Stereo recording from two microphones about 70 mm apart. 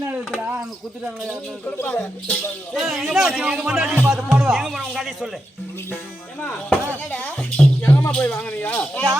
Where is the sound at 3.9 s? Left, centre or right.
Right.